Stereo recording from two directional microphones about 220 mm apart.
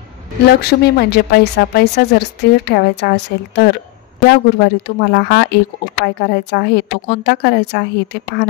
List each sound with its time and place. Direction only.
0.5 s a woman's voice: 45° left (ahead or behind)